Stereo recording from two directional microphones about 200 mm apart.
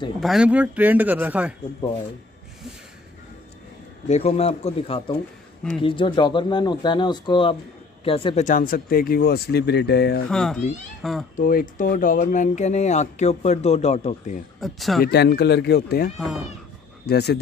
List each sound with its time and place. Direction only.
0.2 s speech: 5° right (ahead or behind)
4.1 s speech: 30° left (ahead or behind)
8.5 s speech: 45° left (ahead or behind)
10.3 s speech: centre (ahead or behind)
11.3 s speech: 45° left (ahead or behind)
14.6 s speech: centre (ahead or behind)
15.0 s speech: 55° left (ahead or behind)
16.2 s speech: centre (ahead or behind)
17.0 s speech: 55° left (ahead or behind)